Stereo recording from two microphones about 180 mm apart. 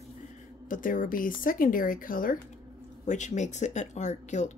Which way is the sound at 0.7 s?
50° left (ahead or behind).